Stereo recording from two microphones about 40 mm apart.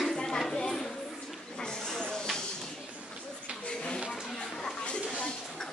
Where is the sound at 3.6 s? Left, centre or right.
Left.